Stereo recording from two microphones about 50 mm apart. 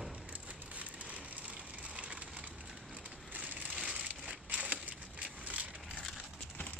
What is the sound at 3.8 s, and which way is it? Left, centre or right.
Crumpling, centre.